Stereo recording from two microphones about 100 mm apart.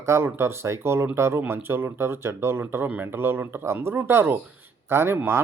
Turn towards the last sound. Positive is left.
turn(degrees=-25)  # may be behind; listen again after turning